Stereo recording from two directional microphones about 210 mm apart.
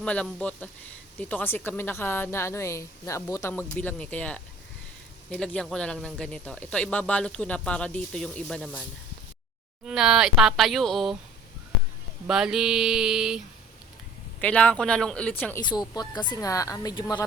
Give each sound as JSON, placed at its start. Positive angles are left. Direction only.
{"t": 0.0, "sound": "a woman's voice", "side_deg": 5}
{"t": 9.8, "sound": "speech", "side_deg": -5}
{"t": 12.3, "sound": "speech", "side_deg": 0}
{"t": 14.4, "sound": "speech", "side_deg": 5}
{"t": 15.6, "sound": "a woman's voice", "side_deg": 20}